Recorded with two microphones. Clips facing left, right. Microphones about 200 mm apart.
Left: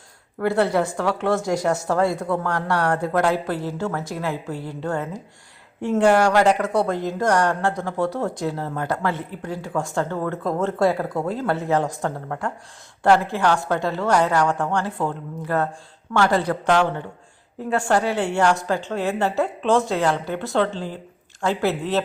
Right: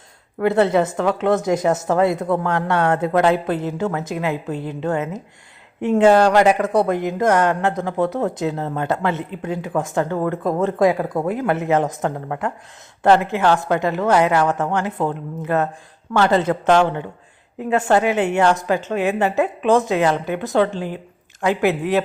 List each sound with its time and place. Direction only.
0.3 s a woman's voice: 20° right (ahead or behind)